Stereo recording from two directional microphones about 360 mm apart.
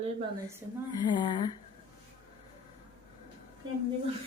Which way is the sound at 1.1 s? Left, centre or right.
Centre.